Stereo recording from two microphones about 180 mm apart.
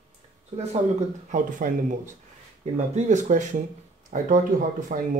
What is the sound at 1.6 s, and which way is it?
Speech, 50° right (ahead or behind).